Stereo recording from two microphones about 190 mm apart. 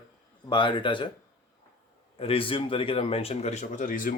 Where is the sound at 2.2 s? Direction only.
30° left (ahead or behind).